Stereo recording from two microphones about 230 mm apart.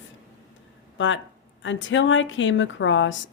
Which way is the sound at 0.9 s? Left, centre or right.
Left.